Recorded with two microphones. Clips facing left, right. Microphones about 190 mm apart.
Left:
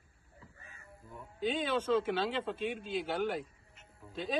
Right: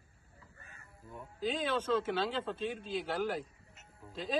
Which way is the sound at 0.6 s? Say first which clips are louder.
Left 1 dB; 50° right (ahead or behind).